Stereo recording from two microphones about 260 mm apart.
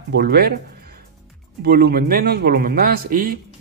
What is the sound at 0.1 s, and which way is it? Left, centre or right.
Speech, right.